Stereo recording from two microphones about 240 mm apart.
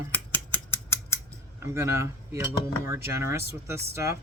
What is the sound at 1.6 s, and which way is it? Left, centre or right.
Speech, centre.